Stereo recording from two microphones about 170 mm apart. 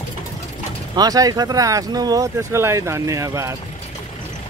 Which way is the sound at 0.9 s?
20° right (ahead or behind).